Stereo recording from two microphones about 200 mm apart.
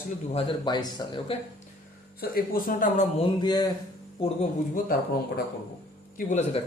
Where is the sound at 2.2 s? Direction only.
45° left (ahead or behind).